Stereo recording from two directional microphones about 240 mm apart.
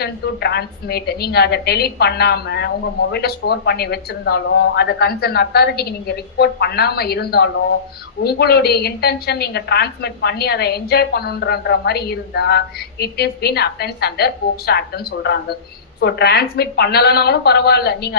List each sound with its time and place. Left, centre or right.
0.0 s a woman's voice: left